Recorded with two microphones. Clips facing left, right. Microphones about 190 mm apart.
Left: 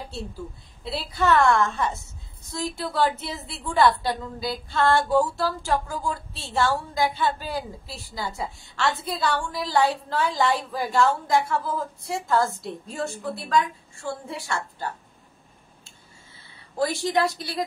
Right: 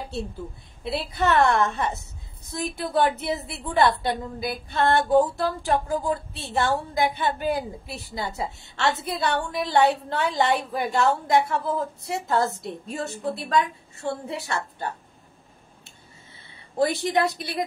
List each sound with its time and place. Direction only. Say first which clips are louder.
0.8 s a woman's voice: even; 20° right (ahead or behind)
16.4 s speech: right 3 dB; 20° right (ahead or behind)